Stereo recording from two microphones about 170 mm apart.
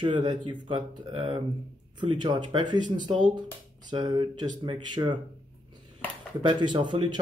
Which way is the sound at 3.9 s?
25° right (ahead or behind).